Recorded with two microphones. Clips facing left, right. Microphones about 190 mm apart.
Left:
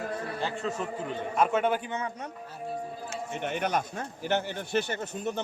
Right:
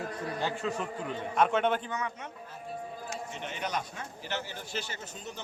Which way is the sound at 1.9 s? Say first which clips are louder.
Left 2 dB; 30° left (ahead or behind).